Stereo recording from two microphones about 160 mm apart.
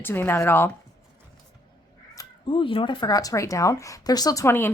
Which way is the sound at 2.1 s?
30° left (ahead or behind).